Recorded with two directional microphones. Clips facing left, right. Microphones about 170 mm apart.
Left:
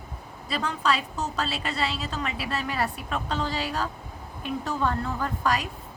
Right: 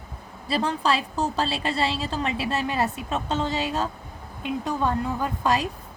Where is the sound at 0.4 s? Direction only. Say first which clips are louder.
Right 3 dB; 30° right (ahead or behind).